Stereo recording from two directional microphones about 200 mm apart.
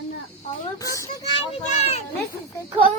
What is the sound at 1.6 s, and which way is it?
Children playing, 35° left (ahead or behind).